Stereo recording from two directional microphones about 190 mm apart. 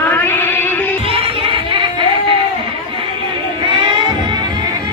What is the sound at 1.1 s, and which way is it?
Music, 30° right (ahead or behind).